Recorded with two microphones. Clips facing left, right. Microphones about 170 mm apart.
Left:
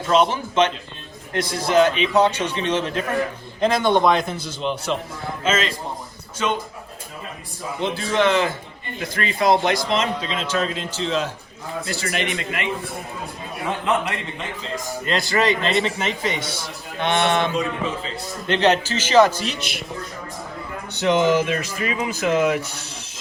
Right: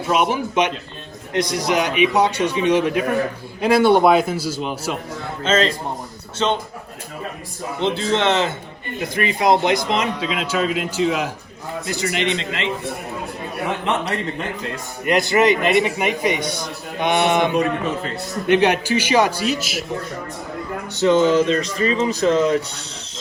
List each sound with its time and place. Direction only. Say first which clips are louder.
0.1 s a man's voice: left 1 dB; 10° right (ahead or behind)
5.4 s a man's voice: right 4 dB; 30° right (ahead or behind)
7.8 s a man's voice: right 1 dB; 25° right (ahead or behind)
14.0 s a man's voice: right 4 dB; 35° right (ahead or behind)
15.0 s a man's voice: right 5 dB; 20° right (ahead or behind)
17.5 s a man's voice: right 4 dB; 65° right (ahead or behind)
18.4 s a man's voice: right 2 dB; 10° right (ahead or behind)
20.9 s speech: right 3 dB; 15° left (ahead or behind)